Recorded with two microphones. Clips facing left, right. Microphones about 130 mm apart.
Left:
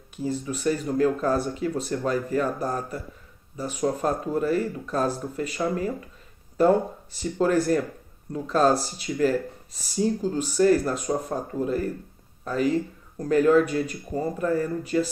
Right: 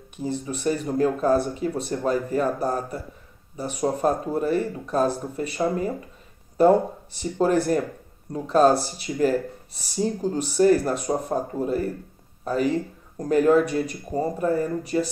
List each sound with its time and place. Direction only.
0.2 s speech: 25° right (ahead or behind)
7.4 s speech: 25° right (ahead or behind)
8.6 s speech: 25° right (ahead or behind)
13.2 s speech: 20° right (ahead or behind)
14.1 s speech: 30° right (ahead or behind)